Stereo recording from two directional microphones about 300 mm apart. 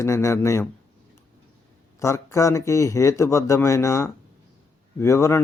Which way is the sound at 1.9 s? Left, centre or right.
Centre.